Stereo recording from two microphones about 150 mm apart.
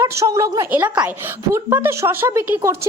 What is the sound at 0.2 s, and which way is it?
A woman's voice, 20° right (ahead or behind).